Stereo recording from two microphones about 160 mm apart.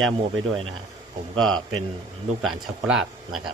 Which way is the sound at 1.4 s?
Centre (ahead or behind).